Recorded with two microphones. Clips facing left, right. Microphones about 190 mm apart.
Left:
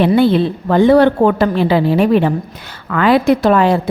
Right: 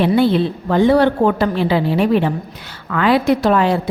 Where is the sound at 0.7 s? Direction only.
55° left (ahead or behind).